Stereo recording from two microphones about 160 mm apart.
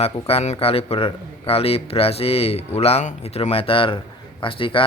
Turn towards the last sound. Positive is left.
turn(degrees=35)  # may be behind; listen again after turning